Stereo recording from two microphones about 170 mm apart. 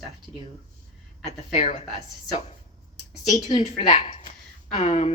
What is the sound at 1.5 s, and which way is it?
Speech, 40° left (ahead or behind).